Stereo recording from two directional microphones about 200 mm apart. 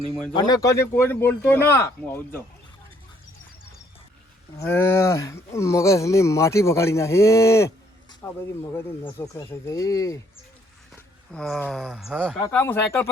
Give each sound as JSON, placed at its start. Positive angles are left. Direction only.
{"t": 0.3, "sound": "speech", "side_deg": 20}
{"t": 4.5, "sound": "speech", "side_deg": 10}
{"t": 11.3, "sound": "speech", "side_deg": 5}
{"t": 12.5, "sound": "speech", "side_deg": 10}